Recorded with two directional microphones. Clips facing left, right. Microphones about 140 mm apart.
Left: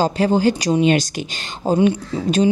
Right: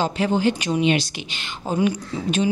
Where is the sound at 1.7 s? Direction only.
30° left (ahead or behind).